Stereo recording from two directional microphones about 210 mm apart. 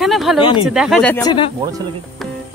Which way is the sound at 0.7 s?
Centre (ahead or behind).